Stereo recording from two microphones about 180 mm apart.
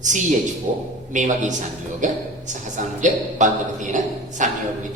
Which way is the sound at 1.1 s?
45° right (ahead or behind).